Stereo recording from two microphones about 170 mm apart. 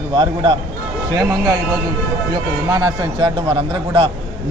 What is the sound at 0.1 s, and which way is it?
A man's voice, 30° right (ahead or behind).